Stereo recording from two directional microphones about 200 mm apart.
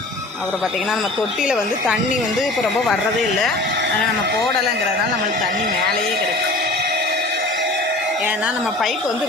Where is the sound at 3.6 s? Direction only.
60° right (ahead or behind).